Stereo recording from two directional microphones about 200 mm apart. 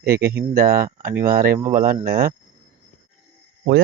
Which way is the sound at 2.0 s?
50° right (ahead or behind).